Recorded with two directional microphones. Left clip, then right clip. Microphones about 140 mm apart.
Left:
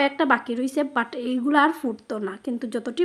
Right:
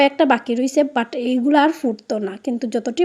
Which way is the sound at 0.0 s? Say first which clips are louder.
Right 6 dB; 20° right (ahead or behind).